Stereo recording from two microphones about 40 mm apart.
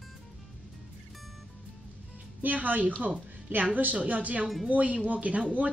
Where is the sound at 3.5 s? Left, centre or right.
Right.